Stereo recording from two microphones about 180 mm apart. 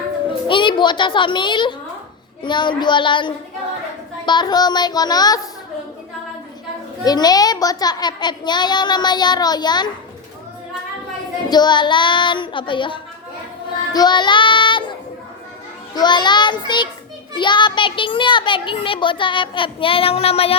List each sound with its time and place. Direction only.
0.4 s a child's voice: 25° left (ahead or behind)
7.0 s a child's voice: 20° left (ahead or behind)
11.4 s a child's voice: 25° left (ahead or behind)
13.9 s child singing: 25° left (ahead or behind)
16.0 s a child's voice: 25° left (ahead or behind)